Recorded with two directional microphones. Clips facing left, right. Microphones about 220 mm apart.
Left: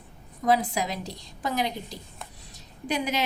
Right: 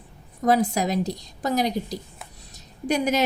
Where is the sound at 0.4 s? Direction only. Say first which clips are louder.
Right 4 dB; 45° right (ahead or behind).